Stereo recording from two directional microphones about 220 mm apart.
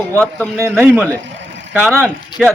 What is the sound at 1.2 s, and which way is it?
Vehicle, 55° right (ahead or behind).